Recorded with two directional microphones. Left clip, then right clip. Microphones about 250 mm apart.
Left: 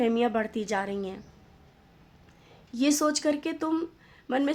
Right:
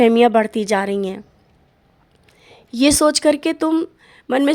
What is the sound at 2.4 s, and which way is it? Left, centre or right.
A woman's voice, right.